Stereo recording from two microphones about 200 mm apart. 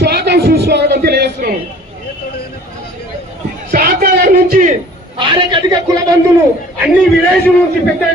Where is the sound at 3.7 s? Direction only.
45° right (ahead or behind).